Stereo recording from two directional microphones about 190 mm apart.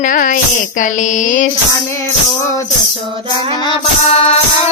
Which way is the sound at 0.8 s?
40° left (ahead or behind).